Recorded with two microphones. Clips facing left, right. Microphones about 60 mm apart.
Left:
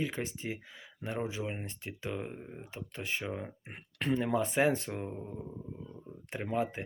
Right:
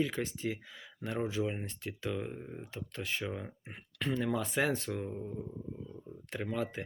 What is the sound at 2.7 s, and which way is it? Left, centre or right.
Speech, centre.